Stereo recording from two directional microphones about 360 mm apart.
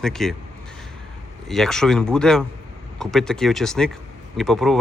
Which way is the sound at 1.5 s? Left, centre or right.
Centre.